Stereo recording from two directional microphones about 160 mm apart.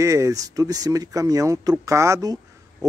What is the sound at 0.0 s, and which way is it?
A man's voice, 20° right (ahead or behind).